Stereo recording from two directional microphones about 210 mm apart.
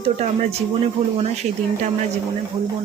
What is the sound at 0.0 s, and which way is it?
Speech, 30° right (ahead or behind).